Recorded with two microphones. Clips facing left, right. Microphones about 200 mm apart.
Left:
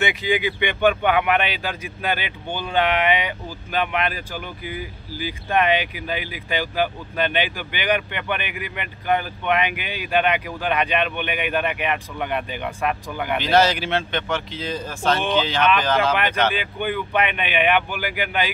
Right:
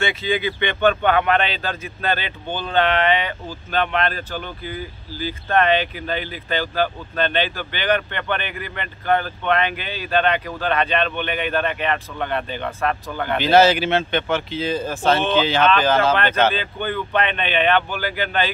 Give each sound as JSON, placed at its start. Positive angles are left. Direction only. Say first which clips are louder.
{"t": 0.0, "sound": "speech", "louder": "even", "side_deg": 15}
{"t": 13.4, "sound": "speech", "louder": "right 4 dB", "side_deg": -5}
{"t": 16.5, "sound": "speech", "louder": "even", "side_deg": 15}